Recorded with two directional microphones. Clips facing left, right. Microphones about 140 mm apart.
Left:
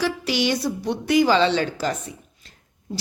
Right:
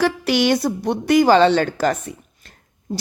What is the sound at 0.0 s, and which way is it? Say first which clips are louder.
A woman's voice: right 5 dB; 55° right (ahead or behind).